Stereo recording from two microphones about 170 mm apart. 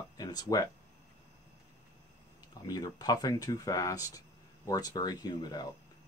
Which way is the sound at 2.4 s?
25° left (ahead or behind).